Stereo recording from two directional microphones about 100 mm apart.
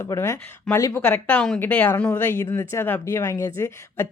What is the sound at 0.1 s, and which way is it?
Speech, 30° left (ahead or behind).